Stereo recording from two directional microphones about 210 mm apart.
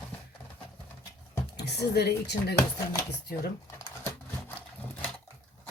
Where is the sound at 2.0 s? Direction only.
50° left (ahead or behind).